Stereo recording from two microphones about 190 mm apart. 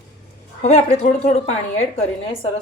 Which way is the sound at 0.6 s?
35° left (ahead or behind).